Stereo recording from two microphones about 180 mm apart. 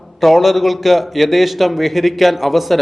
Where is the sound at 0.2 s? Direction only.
Centre (ahead or behind).